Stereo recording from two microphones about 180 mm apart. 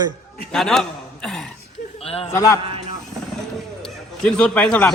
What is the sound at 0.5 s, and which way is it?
Speech, centre (ahead or behind).